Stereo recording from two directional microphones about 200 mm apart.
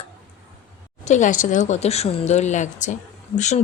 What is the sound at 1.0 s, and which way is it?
Speech, 40° left (ahead or behind).